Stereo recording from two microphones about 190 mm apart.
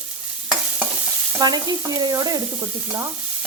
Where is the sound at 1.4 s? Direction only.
20° right (ahead or behind).